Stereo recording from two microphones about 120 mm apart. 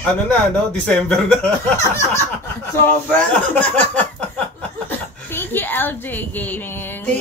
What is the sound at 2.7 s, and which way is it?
A woman's voice, 15° left (ahead or behind).